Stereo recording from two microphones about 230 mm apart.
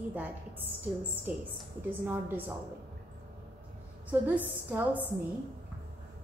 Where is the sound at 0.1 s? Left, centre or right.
Centre.